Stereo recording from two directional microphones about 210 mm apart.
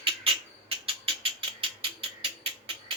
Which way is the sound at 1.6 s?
25° right (ahead or behind).